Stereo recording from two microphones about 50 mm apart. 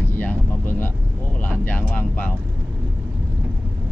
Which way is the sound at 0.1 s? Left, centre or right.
Left.